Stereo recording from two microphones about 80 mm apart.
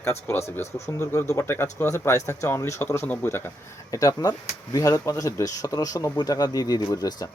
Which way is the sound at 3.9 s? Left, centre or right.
Left.